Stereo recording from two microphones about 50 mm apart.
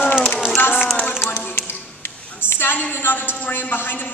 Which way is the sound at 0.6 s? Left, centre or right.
Left.